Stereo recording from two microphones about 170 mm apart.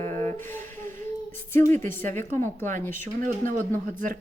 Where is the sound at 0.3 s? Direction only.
15° left (ahead or behind).